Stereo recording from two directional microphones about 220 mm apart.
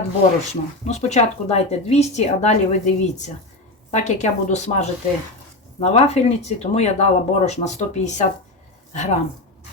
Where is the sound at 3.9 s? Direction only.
30° left (ahead or behind).